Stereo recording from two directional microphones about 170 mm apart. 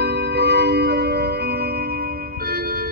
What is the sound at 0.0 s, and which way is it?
Music, 75° right (ahead or behind).